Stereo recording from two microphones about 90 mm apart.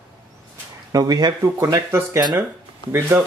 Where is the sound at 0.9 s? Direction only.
45° right (ahead or behind).